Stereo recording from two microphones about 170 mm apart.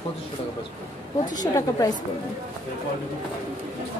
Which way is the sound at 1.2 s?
25° left (ahead or behind).